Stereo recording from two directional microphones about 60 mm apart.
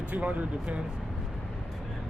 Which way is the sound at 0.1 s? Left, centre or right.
Right.